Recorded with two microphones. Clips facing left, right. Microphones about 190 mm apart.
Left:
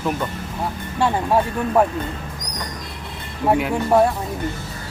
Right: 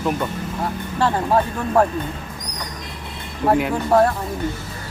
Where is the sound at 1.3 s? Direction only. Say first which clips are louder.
Even; 5° left (ahead or behind).